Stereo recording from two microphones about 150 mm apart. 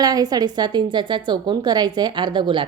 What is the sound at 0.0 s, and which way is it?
A woman's voice, 25° right (ahead or behind).